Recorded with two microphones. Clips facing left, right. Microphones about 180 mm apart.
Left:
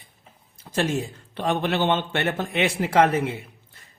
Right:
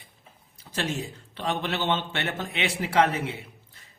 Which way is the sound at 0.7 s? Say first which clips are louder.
Left 6 dB; 50° left (ahead or behind).